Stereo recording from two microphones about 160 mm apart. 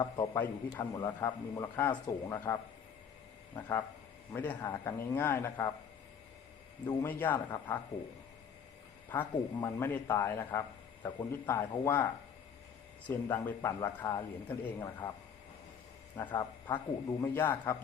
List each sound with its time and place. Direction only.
0.0 s a man's voice: 20° left (ahead or behind)
6.8 s a man's voice: 15° left (ahead or behind)
9.1 s a man's voice: 20° left (ahead or behind)
13.1 s a man's voice: 15° left (ahead or behind)
16.3 s a man's voice: 25° left (ahead or behind)